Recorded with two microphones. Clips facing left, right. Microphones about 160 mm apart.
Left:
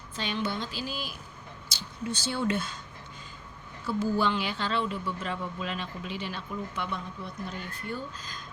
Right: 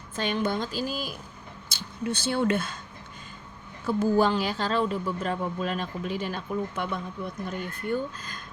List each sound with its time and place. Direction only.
0.2 s a woman's voice: 50° right (ahead or behind)
1.7 s speech: 55° right (ahead or behind)
3.8 s a woman's voice: 45° right (ahead or behind)